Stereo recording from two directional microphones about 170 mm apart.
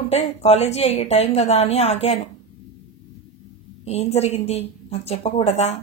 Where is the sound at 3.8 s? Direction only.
40° left (ahead or behind).